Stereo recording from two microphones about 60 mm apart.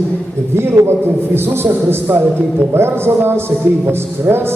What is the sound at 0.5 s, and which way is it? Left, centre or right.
A man's voice, right.